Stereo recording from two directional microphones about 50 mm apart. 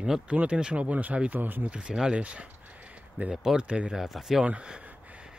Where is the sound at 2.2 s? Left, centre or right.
Right.